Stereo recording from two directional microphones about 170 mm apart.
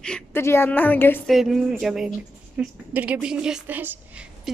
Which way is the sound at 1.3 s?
Centre (ahead or behind).